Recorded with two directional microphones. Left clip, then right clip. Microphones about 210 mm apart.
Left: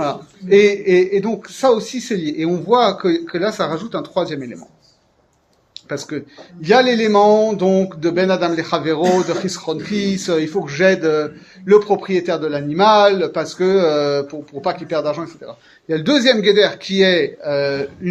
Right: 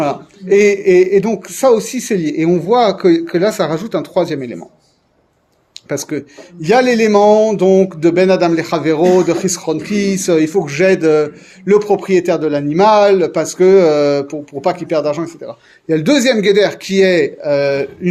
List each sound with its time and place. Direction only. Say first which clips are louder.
0.0 s a man's voice: right 4 dB; 45° right (ahead or behind)
5.9 s a man's voice: right 5 dB; 45° right (ahead or behind)